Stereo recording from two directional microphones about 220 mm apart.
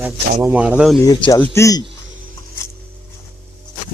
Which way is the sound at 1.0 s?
15° left (ahead or behind).